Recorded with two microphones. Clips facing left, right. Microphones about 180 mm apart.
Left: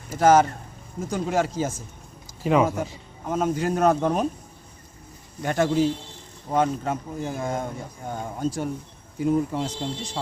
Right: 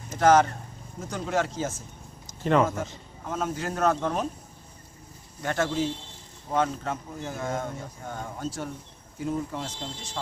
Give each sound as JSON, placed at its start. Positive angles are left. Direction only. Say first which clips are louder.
{"t": 0.1, "sound": "speech", "louder": "left 2 dB", "side_deg": 10}
{"t": 5.4, "sound": "speech", "louder": "left 5 dB", "side_deg": 15}